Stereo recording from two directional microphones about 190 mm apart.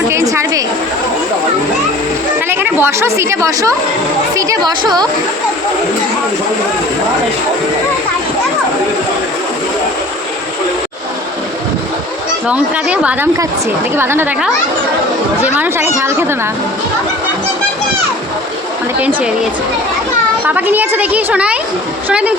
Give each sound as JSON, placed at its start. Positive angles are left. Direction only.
{"t": 0.1, "sound": "a sound", "side_deg": -15}
{"t": 2.5, "sound": "a woman's voice", "side_deg": -10}
{"t": 12.5, "sound": "a woman's voice", "side_deg": -5}
{"t": 15.5, "sound": "a woman's voice", "side_deg": -10}
{"t": 18.9, "sound": "a woman's voice", "side_deg": -5}
{"t": 20.5, "sound": "a woman's voice", "side_deg": -10}